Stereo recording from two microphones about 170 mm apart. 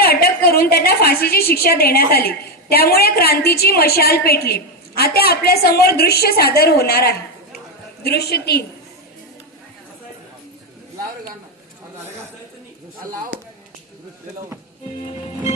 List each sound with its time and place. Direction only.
0.0 s a woman's voice: 65° left (ahead or behind)